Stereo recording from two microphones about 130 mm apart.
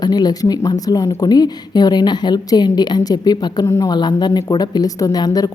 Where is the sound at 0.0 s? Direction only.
30° left (ahead or behind).